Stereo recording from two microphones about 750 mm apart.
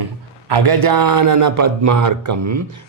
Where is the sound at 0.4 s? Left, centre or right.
Right.